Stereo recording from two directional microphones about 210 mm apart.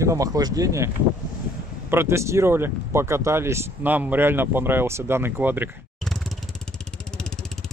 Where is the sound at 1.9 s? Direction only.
10° right (ahead or behind).